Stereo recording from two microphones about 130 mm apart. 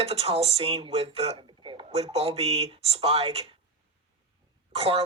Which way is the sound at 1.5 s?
40° right (ahead or behind).